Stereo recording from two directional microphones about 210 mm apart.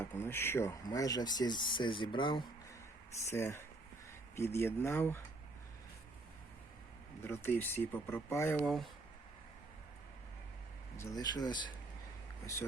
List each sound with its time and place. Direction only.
0.0 s speech: 10° left (ahead or behind)
3.2 s speech: 10° left (ahead or behind)
7.2 s speech: 10° left (ahead or behind)
11.2 s speech: 20° left (ahead or behind)